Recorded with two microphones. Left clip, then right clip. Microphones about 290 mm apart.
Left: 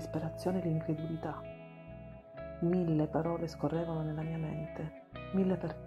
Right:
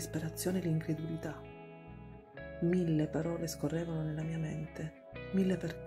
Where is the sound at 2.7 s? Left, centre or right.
Centre.